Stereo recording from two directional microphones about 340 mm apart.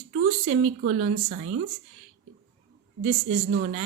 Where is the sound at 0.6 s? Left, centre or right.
Right.